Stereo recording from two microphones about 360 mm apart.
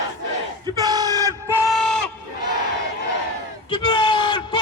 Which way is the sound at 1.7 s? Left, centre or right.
Centre.